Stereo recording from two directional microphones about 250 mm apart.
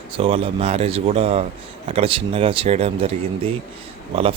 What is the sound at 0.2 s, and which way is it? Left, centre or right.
Speech, right.